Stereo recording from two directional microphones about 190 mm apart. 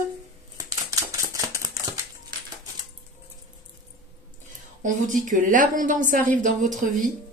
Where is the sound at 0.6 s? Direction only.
20° right (ahead or behind).